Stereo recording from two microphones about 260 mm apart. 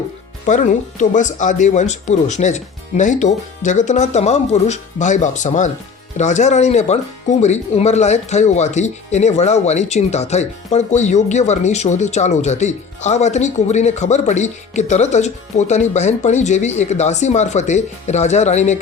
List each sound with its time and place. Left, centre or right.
0.4 s speech: left